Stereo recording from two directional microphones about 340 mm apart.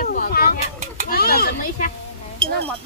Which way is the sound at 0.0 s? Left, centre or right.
Left.